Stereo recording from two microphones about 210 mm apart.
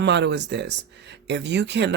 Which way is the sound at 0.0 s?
55° right (ahead or behind).